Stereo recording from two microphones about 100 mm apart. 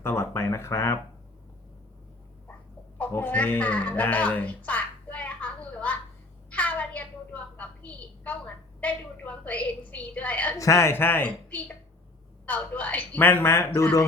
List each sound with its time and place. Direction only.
0.0 s speech: 25° left (ahead or behind)
3.1 s a sound: 20° left (ahead or behind)
10.6 s a woman's voice: 30° left (ahead or behind)